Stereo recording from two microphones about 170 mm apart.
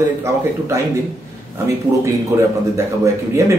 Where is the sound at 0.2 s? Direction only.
15° right (ahead or behind).